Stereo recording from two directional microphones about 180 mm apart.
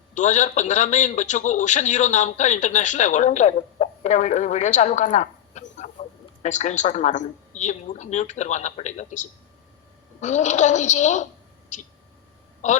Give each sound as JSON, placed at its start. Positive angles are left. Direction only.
{"t": 0.1, "sound": "a man's voice", "side_deg": 40}